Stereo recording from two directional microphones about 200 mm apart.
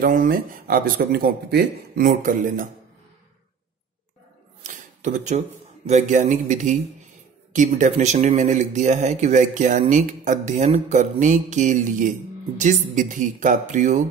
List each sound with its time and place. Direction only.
0.0 s speech: 45° right (ahead or behind)
4.6 s a sound: 35° right (ahead or behind)
5.9 s a man's voice: 35° right (ahead or behind)